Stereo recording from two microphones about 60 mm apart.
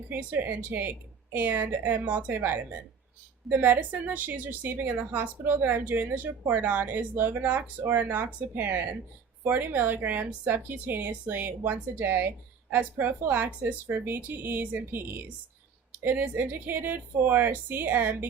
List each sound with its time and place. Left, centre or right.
0.1 s a woman's voice: right